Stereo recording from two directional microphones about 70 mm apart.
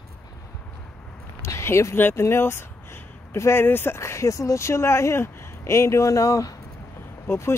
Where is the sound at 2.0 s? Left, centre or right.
Left.